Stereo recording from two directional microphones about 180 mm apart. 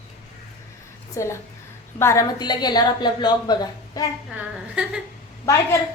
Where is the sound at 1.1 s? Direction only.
15° left (ahead or behind).